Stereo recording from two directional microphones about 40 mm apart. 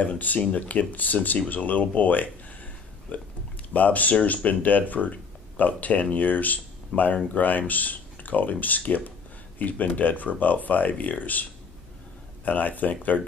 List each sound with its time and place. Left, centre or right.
0.0 s speech: left
12.4 s speech: left